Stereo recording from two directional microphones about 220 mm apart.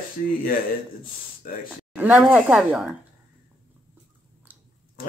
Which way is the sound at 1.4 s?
40° left (ahead or behind).